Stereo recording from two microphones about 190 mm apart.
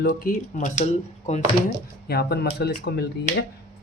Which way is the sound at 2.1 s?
55° left (ahead or behind).